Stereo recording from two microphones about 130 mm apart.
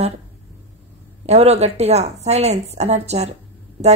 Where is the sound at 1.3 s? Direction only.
55° right (ahead or behind).